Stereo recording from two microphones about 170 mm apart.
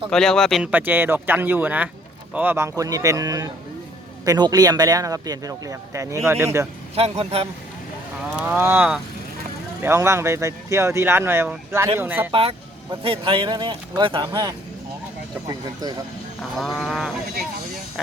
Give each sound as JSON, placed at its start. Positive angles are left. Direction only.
{"t": 0.1, "sound": "speech", "side_deg": 5}
{"t": 0.7, "sound": "speech", "side_deg": -10}
{"t": 6.9, "sound": "a man's voice", "side_deg": -35}
{"t": 8.4, "sound": "speech", "side_deg": -10}
{"t": 12.3, "sound": "a man's voice", "side_deg": -35}
{"t": 16.6, "sound": "speech", "side_deg": 0}